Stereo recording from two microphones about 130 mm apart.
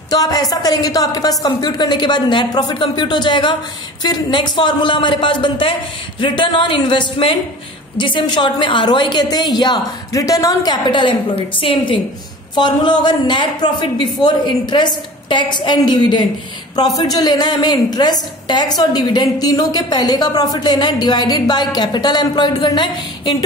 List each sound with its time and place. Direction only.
0.1 s a woman's voice: 30° left (ahead or behind)